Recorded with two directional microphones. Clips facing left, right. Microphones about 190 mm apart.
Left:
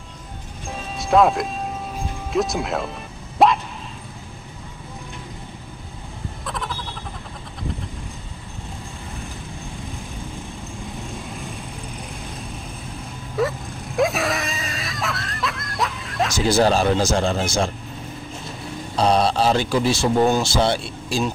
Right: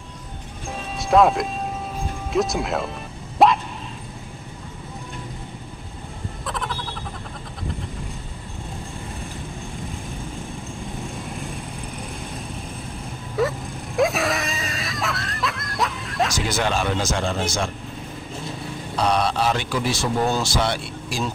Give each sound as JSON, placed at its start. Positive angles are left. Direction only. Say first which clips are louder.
{"t": 0.7, "sound": "music", "louder": "even", "side_deg": 0}
{"t": 2.3, "sound": "speech", "louder": "even", "side_deg": 0}
{"t": 3.4, "sound": "dog", "louder": "even", "side_deg": 0}
{"t": 6.4, "sound": "frog", "louder": "right 1 dB", "side_deg": 0}
{"t": 13.4, "sound": "screaming", "louder": "even", "side_deg": 0}
{"t": 16.4, "sound": "a man's voice", "louder": "left 6 dB", "side_deg": 35}
{"t": 18.9, "sound": "a man's voice", "louder": "left 3 dB", "side_deg": 30}
{"t": 20.2, "sound": "speech", "louder": "left 4 dB", "side_deg": 15}
{"t": 20.5, "sound": "speech", "louder": "left 3 dB", "side_deg": 30}